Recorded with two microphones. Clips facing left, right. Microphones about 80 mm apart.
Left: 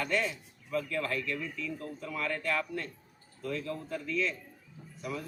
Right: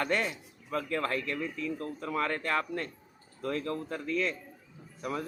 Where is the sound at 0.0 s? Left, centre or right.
Right.